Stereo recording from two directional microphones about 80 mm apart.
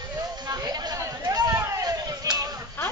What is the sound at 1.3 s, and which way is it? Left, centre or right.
Vehicle, right.